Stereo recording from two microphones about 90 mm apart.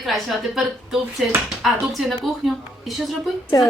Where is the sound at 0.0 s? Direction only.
Centre (ahead or behind).